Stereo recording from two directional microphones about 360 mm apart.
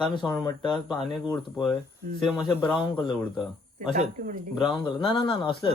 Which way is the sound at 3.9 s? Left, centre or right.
Right.